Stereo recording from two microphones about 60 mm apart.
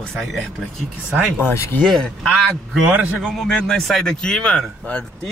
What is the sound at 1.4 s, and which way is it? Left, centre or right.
Speech, left.